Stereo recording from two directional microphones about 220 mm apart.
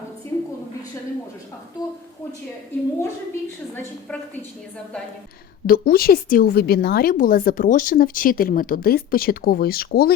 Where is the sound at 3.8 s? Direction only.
10° left (ahead or behind).